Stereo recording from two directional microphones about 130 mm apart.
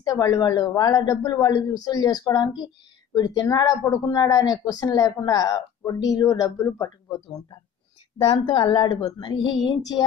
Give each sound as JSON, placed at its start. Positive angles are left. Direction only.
{"t": 0.0, "sound": "a woman's voice", "side_deg": 30}
{"t": 8.2, "sound": "speech", "side_deg": 45}